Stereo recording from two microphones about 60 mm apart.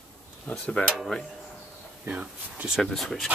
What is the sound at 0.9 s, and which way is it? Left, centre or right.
Speech, centre.